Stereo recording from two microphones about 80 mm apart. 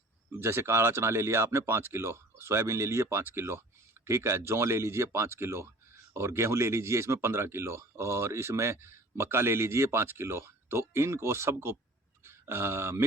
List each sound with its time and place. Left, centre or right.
0.3 s speech: right